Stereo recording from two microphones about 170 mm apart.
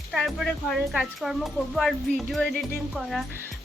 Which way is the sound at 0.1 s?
Centre (ahead or behind).